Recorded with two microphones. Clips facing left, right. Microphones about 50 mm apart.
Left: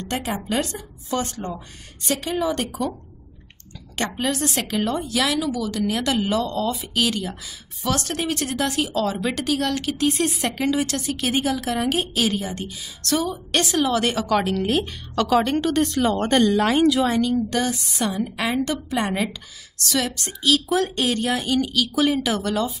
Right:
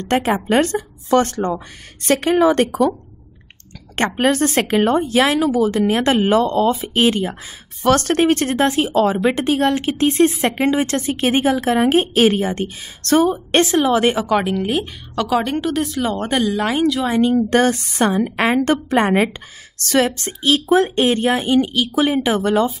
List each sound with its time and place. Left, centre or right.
0.0 s a woman's voice: right
3.9 s speech: right
7.8 s speech: right; by 17.1 s centre
17.4 s a woman's voice: right